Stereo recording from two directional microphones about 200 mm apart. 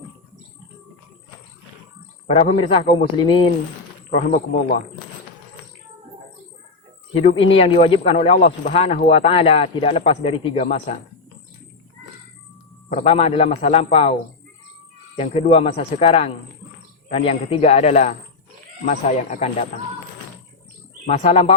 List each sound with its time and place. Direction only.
2.3 s speech: 30° left (ahead or behind)
4.1 s a man's voice: 40° left (ahead or behind)
7.1 s speech: 30° left (ahead or behind)
12.9 s a man's voice: 30° left (ahead or behind)
15.1 s a man's voice: 30° left (ahead or behind)
21.1 s a man's voice: 30° left (ahead or behind)